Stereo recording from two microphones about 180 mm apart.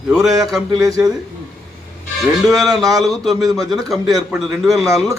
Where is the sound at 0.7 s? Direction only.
20° right (ahead or behind).